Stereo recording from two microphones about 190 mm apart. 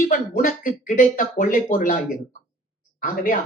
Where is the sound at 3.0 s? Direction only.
45° left (ahead or behind).